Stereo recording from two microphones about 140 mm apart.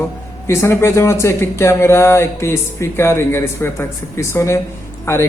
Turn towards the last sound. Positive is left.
turn(degrees=20)  # may be behind; listen again after turning